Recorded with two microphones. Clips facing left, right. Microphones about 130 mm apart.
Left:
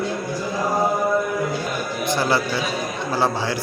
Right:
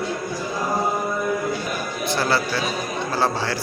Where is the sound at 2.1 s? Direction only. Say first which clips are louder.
Left 1 dB; 20° left (ahead or behind).